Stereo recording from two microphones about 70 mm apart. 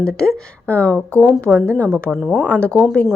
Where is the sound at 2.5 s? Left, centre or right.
Left.